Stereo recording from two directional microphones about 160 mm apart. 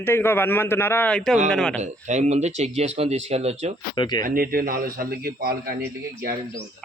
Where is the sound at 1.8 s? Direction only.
45° right (ahead or behind).